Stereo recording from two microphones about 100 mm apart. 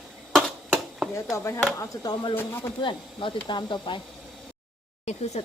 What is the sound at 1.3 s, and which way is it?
Speech, 30° left (ahead or behind).